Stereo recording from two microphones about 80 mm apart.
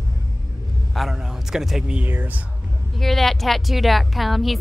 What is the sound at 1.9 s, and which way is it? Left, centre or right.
Speech, right.